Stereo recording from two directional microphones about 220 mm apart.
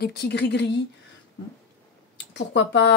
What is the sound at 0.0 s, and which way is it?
Speech, 45° left (ahead or behind).